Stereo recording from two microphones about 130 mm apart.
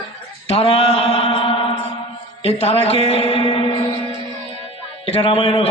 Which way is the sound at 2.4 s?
50° left (ahead or behind).